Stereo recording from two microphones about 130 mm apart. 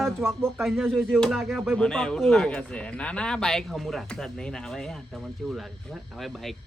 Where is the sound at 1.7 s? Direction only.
5° left (ahead or behind).